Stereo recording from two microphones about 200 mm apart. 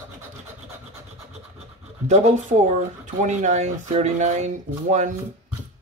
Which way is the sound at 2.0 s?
35° right (ahead or behind).